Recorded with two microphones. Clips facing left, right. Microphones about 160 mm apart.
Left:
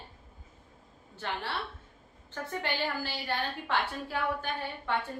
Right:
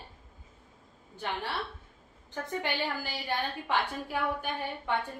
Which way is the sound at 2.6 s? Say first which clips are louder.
Left 2 dB; 15° right (ahead or behind).